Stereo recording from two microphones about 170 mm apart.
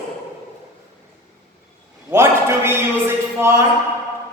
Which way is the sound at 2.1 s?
15° right (ahead or behind).